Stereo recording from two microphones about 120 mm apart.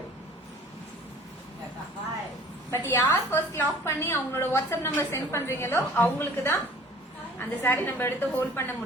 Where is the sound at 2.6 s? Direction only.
20° left (ahead or behind).